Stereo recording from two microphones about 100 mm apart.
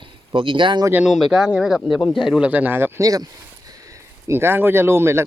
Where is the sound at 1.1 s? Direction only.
5° right (ahead or behind); by 3.0 s 20° right (ahead or behind).